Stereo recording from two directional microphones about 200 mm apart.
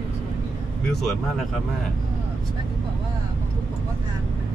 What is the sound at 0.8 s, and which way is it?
Vehicle, centre (ahead or behind).